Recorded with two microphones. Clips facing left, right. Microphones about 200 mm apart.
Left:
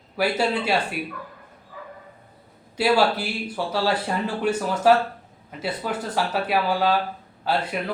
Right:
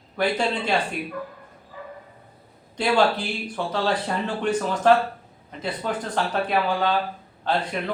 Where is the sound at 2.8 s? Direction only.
5° left (ahead or behind).